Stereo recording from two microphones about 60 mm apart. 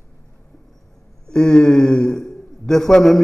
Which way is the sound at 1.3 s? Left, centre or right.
Centre.